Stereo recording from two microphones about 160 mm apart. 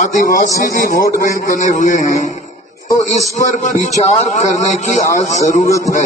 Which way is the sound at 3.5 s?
50° left (ahead or behind).